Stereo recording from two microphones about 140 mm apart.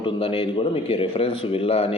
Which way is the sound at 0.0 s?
40° left (ahead or behind).